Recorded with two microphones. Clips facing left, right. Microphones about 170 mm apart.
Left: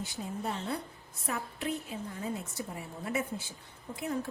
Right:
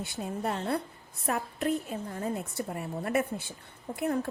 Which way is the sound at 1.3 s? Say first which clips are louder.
Right 6 dB; 50° right (ahead or behind).